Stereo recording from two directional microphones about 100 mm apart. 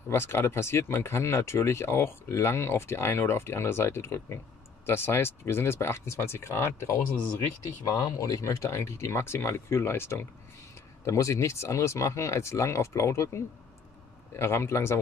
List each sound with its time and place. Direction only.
0.1 s speech: 25° left (ahead or behind)
7.8 s speech: 40° left (ahead or behind)